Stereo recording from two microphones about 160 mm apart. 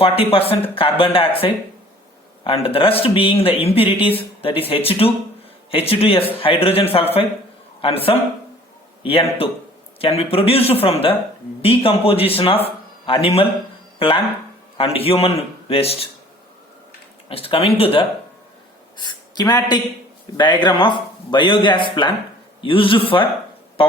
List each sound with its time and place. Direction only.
0.0 s a man's voice: 35° left (ahead or behind)
14.8 s a man's voice: 35° left (ahead or behind)
17.2 s a man's voice: 35° left (ahead or behind)